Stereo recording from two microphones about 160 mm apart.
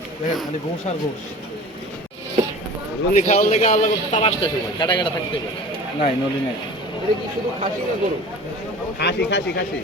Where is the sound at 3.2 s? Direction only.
45° left (ahead or behind).